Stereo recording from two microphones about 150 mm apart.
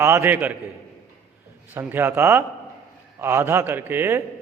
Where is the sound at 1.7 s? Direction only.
15° right (ahead or behind).